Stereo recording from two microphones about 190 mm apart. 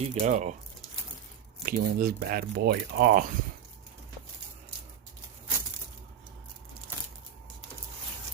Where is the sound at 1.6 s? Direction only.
50° right (ahead or behind).